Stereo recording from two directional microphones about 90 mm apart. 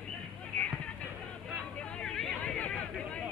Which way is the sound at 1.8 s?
10° left (ahead or behind).